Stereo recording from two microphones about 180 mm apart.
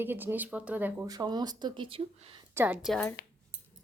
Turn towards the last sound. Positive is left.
turn(degrees=-5)  # may be behind; listen again after turning